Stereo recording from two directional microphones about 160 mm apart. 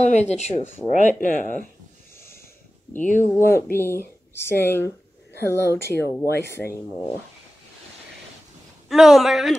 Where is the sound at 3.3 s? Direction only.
15° left (ahead or behind).